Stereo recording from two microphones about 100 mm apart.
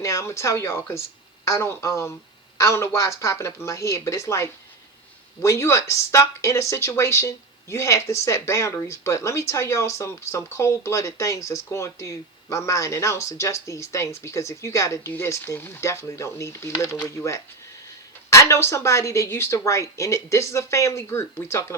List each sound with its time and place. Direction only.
0.0 s speech: 30° left (ahead or behind)